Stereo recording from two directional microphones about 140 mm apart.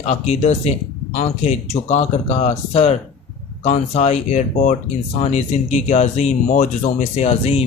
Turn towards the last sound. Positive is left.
turn(degrees=50)  # may be behind; listen again after turning